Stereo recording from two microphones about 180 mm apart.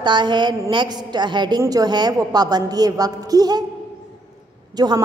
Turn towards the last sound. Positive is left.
turn(degrees=-20)  # may be behind; listen again after turning